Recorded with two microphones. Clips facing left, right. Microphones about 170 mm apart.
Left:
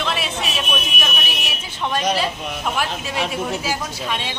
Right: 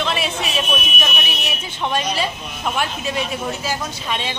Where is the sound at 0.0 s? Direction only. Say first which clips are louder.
Right 2 dB; centre (ahead or behind).